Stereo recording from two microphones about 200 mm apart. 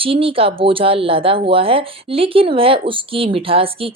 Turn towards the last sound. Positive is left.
turn(degrees=-30)  # may be behind; listen again after turning